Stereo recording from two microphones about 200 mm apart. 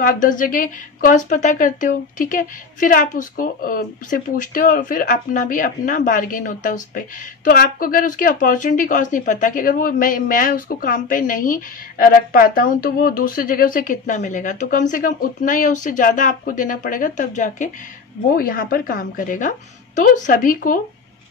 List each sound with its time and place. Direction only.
0.0 s a woman's voice: 40° left (ahead or behind)